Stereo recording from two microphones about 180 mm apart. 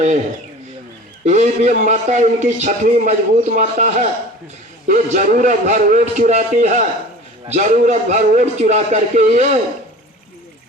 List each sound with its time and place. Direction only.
1.2 s a man's voice: 40° right (ahead or behind)